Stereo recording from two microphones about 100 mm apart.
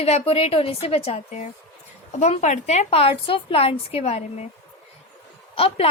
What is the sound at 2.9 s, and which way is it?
A woman's voice, 70° left (ahead or behind).